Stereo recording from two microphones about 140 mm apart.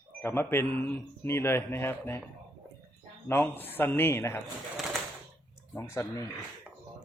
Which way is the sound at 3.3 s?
15° left (ahead or behind).